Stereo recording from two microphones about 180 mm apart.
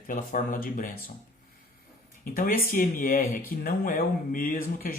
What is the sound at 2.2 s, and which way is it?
Speech, 50° left (ahead or behind).